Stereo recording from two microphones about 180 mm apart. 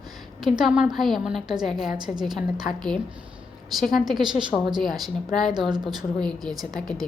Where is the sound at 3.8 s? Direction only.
Centre (ahead or behind).